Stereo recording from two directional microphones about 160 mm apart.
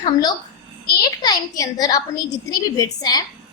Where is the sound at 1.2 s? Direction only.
25° left (ahead or behind).